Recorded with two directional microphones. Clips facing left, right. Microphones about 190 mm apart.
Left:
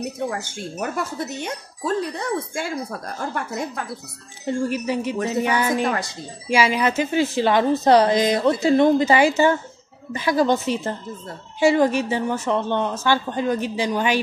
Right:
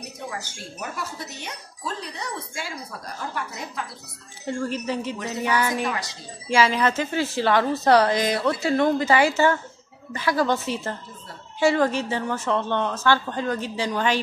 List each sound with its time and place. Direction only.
0.3 s speech: 50° left (ahead or behind)
4.6 s a woman's voice: 10° left (ahead or behind)